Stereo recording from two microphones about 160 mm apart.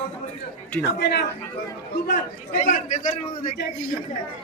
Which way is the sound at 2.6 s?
50° left (ahead or behind).